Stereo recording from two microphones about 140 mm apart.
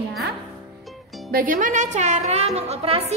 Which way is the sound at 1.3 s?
90° right.